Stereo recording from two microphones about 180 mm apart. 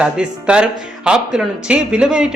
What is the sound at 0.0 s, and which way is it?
Speech, 5° right (ahead or behind).